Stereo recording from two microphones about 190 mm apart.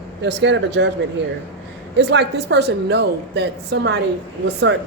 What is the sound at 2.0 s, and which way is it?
A woman's voice, 65° right (ahead or behind).